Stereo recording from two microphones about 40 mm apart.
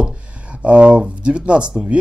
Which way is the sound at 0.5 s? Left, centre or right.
Right.